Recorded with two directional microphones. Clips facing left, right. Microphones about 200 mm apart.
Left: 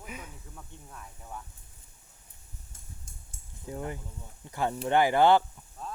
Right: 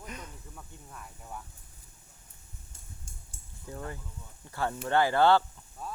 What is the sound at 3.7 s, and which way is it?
Speech, 20° left (ahead or behind).